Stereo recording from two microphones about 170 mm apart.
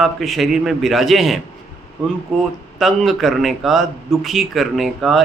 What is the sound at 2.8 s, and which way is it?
A man's voice, centre (ahead or behind).